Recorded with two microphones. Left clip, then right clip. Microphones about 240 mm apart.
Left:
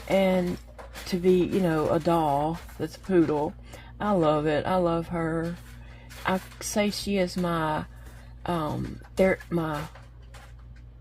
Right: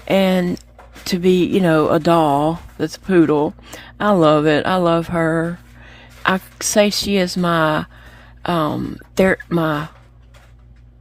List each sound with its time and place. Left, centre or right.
0.1 s speech: right